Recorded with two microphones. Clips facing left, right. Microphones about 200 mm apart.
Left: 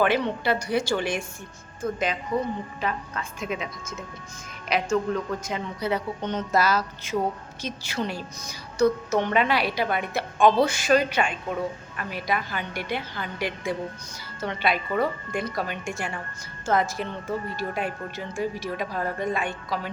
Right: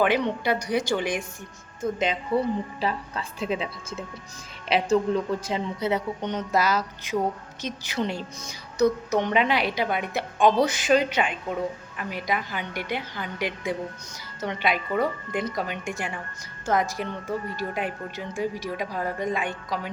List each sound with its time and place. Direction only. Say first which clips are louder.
0.0 s a woman's voice: even; 15° right (ahead or behind)